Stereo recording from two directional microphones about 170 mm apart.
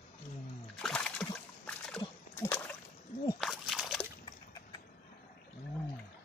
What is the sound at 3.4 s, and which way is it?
Slosh, centre (ahead or behind).